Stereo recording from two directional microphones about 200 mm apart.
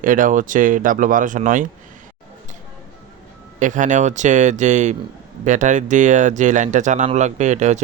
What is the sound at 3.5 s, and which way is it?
Speech, 40° right (ahead or behind).